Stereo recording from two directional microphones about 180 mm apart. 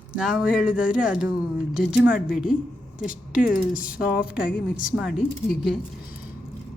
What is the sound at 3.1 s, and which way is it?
Speech, 50° left (ahead or behind).